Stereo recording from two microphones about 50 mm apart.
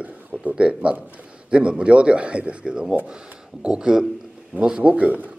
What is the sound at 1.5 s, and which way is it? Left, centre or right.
Speech, right.